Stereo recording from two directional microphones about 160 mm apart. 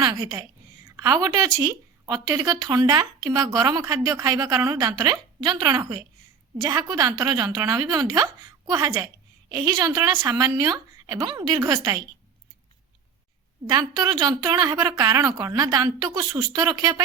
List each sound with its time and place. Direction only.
0.0 s a woman's voice: 25° right (ahead or behind)
13.7 s speech: 25° right (ahead or behind)